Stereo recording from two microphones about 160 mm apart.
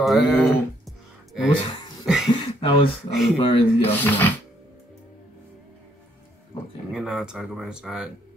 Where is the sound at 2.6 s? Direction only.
35° left (ahead or behind).